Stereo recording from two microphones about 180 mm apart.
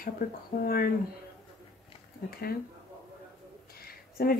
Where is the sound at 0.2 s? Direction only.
45° left (ahead or behind).